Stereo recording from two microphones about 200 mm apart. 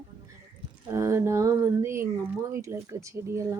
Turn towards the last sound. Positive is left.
turn(degrees=-15)  # may be behind; listen again after turning